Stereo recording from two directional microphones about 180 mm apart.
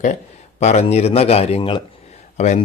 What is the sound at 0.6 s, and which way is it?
A man's voice, 40° left (ahead or behind).